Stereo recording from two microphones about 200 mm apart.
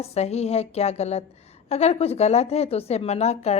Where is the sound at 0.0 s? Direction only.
30° left (ahead or behind).